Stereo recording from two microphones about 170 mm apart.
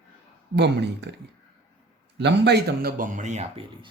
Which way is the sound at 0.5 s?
90° right.